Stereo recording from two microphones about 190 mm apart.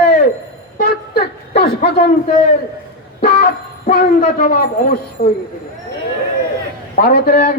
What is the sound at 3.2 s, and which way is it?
Vehicle, 60° left (ahead or behind).